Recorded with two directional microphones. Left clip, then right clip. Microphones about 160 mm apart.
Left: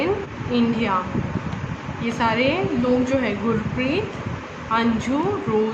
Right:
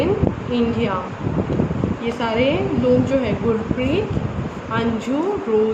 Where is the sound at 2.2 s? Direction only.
30° left (ahead or behind).